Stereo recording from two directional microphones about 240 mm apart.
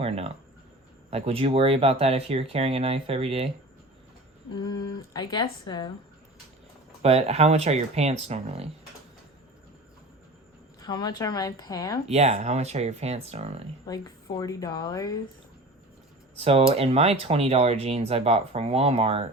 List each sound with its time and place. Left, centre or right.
0.0 s speech: right
4.5 s speech: centre
7.0 s speech: right
10.8 s speech: centre
12.0 s speech: right
13.8 s speech: centre
16.4 s speech: right